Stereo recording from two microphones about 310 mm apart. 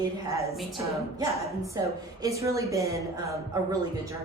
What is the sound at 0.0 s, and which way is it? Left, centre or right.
Speech, centre.